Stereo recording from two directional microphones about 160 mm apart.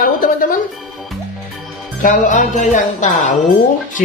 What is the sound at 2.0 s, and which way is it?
Music, 55° left (ahead or behind).